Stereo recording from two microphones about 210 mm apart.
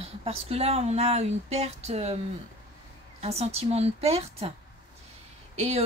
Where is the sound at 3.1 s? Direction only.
30° right (ahead or behind).